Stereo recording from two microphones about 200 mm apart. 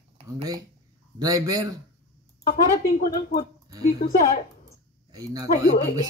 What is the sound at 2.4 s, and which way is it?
Speech, 45° left (ahead or behind).